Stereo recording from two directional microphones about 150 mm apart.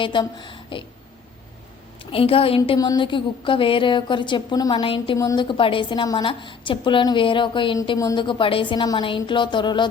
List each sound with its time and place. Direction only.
0.0 s a woman's voice: 30° left (ahead or behind)
2.1 s a woman's voice: 40° left (ahead or behind)
2.7 s a woman's voice: 25° left (ahead or behind)
5.1 s a woman's voice: 25° left (ahead or behind)